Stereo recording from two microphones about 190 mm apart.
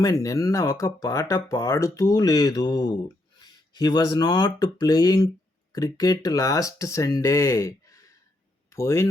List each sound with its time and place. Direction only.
0.0 s speech: 15° left (ahead or behind)